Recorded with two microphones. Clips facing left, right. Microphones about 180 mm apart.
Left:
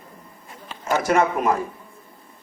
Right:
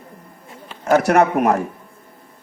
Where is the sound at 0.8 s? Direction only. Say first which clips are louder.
Right 5 dB; 70° right (ahead or behind).